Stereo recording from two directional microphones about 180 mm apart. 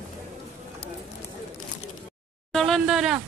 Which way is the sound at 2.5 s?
Centre (ahead or behind).